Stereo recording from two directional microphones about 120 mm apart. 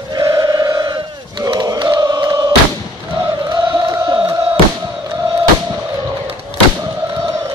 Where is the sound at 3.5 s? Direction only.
30° right (ahead or behind).